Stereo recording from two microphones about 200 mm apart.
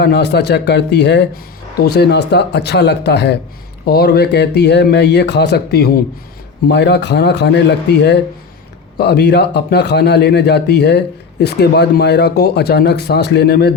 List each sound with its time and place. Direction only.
0.0 s a man's voice: 60° left (ahead or behind)